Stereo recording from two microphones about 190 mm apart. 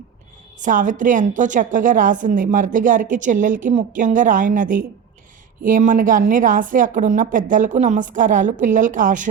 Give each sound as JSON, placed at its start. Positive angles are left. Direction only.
{"t": 0.6, "sound": "a woman's voice", "side_deg": -45}